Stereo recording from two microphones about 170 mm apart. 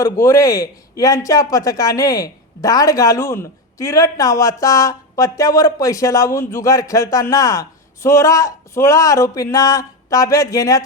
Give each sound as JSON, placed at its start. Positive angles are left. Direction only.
{"t": 0.0, "sound": "speech", "side_deg": 20}